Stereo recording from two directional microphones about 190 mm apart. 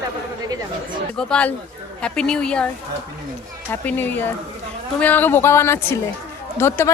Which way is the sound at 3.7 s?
10° left (ahead or behind).